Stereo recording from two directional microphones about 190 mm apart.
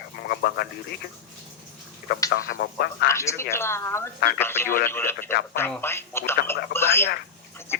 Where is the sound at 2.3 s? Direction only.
55° left (ahead or behind).